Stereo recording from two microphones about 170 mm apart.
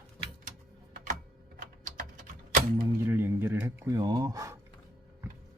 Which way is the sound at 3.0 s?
15° right (ahead or behind).